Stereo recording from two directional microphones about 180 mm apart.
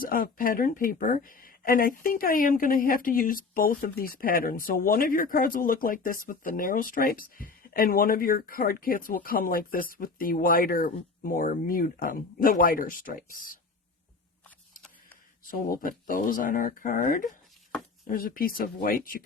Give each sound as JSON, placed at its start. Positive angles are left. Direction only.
{"t": 0.0, "sound": "speech", "side_deg": 50}
{"t": 15.4, "sound": "speech", "side_deg": 50}